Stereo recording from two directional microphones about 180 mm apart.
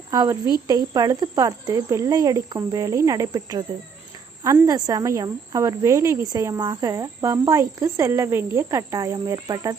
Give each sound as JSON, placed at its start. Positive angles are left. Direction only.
{"t": 0.1, "sound": "speech", "side_deg": -20}